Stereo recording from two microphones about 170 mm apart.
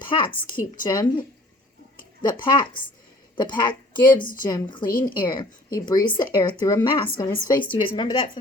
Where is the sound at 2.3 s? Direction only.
30° left (ahead or behind).